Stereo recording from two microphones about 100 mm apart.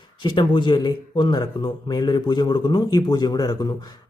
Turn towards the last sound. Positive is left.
turn(degrees=45)  # may be behind; listen again after turning